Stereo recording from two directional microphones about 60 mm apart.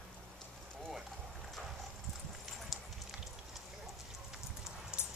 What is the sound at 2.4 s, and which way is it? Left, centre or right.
Clip-clop, centre.